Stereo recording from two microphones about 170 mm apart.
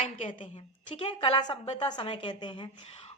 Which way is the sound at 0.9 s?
30° left (ahead or behind).